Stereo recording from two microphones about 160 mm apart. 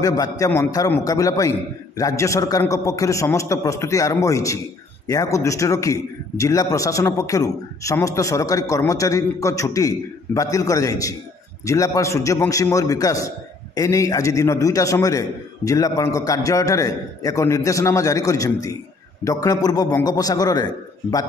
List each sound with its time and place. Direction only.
0.0 s a man's voice: 20° left (ahead or behind)